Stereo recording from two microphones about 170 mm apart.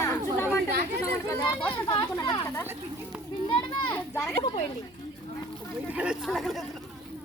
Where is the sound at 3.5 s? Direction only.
30° left (ahead or behind).